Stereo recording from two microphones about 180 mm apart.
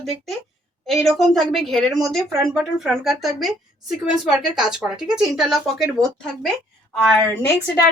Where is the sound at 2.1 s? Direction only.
Centre (ahead or behind).